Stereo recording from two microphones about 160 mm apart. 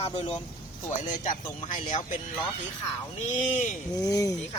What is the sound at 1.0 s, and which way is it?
Speech, 55° left (ahead or behind).